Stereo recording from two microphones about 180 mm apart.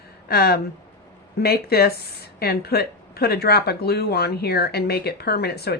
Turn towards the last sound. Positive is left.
turn(degrees=60)  # may be behind; listen again after turning